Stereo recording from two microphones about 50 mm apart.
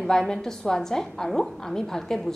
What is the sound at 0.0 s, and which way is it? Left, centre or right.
A woman's voice, centre.